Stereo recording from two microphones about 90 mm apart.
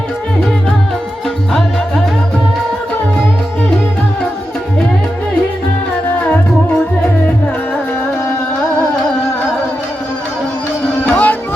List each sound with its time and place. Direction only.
11.0 s tabla: 20° left (ahead or behind)